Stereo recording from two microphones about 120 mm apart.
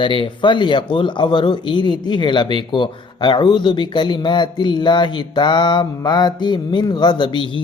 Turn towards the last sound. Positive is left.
turn(degrees=40)  # may be behind; listen again after turning